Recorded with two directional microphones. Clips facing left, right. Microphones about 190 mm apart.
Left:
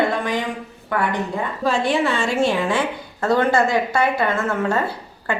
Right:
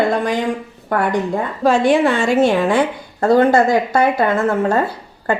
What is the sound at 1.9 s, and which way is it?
Speech, 55° right (ahead or behind).